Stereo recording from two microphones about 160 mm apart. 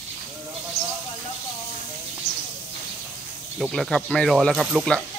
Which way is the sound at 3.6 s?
Centre (ahead or behind).